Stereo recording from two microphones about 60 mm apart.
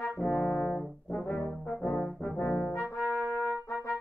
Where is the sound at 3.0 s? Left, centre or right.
Right.